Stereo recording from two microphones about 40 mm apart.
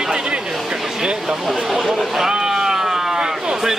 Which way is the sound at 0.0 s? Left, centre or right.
Right.